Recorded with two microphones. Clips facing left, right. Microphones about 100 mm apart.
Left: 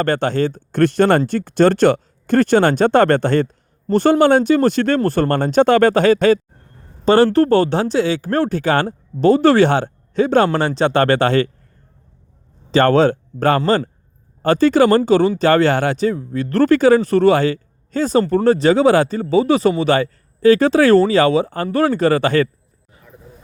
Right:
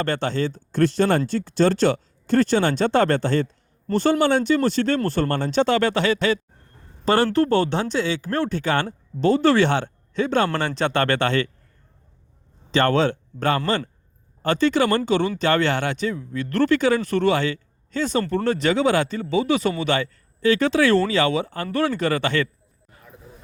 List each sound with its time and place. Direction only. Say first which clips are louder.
0.0 s speech: left 6 dB; 50° left (ahead or behind)
7.0 s speech: left 7 dB; 30° left (ahead or behind)
7.3 s a man's voice: left 5 dB; 45° left (ahead or behind)
12.7 s a man's voice: left 6 dB; 40° left (ahead or behind)